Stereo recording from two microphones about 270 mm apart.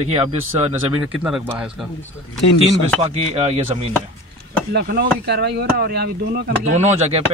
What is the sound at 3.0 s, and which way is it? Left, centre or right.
Speech, right.